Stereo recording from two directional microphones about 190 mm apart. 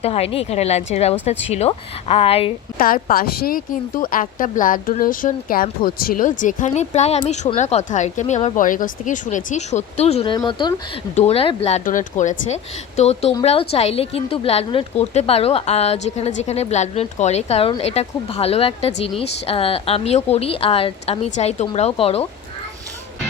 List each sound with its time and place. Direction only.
0.0 s a woman's voice: 30° left (ahead or behind)
2.7 s a woman's voice: 50° left (ahead or behind); by 10.8 s 25° left (ahead or behind)
11.1 s a woman's voice: 35° left (ahead or behind)